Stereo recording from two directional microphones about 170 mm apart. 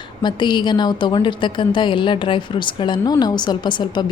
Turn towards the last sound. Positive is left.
turn(degrees=25)  # may be behind; listen again after turning